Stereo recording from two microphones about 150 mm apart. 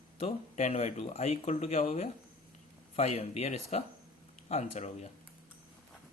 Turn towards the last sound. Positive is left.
turn(degrees=50)  # may be behind; listen again after turning